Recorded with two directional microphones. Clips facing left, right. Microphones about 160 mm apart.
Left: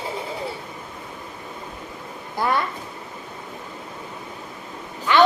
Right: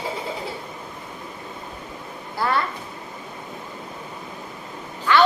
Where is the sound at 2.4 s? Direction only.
20° left (ahead or behind).